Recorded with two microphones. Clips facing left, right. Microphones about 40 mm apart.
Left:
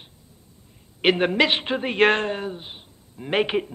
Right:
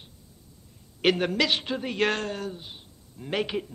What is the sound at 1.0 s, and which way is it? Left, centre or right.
A man's voice, left.